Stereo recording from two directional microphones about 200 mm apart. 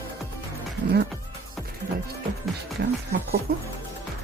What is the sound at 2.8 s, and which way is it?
Music, 55° right (ahead or behind).